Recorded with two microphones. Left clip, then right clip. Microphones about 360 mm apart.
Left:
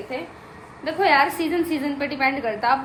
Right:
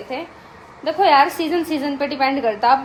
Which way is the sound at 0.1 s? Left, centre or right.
Centre.